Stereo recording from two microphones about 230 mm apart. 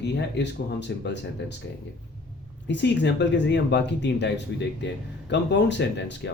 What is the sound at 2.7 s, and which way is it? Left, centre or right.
Speech, left.